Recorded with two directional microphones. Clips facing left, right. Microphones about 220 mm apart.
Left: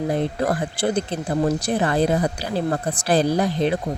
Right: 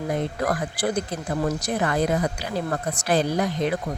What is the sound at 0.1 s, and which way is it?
Speech, 30° left (ahead or behind).